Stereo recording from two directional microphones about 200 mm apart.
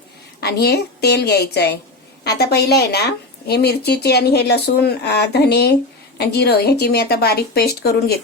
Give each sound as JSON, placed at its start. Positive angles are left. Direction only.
{"t": 0.3, "sound": "a woman's voice", "side_deg": 55}